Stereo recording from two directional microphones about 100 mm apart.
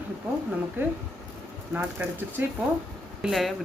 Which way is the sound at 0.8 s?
25° right (ahead or behind).